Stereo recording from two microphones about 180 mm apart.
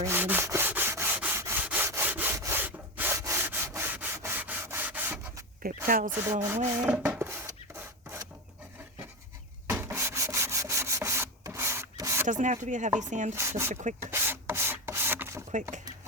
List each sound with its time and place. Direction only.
0.0 s rub: 10° right (ahead or behind)
5.6 s a sound: 55° right (ahead or behind)
6.1 s speech: 10° right (ahead or behind)
6.8 s rub: 5° right (ahead or behind)
9.6 s rub: 15° right (ahead or behind)
12.2 s speech: 45° right (ahead or behind)
13.3 s speech: 15° right (ahead or behind)
13.7 s speech: 45° right (ahead or behind)
14.1 s rub: 10° right (ahead or behind)